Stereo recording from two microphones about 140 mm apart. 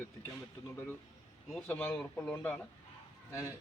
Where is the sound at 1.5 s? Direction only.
10° left (ahead or behind).